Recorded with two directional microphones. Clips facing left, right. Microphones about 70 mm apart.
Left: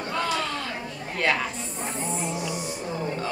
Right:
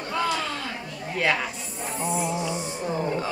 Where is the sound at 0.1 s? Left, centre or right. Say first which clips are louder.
Right 1 dB; centre.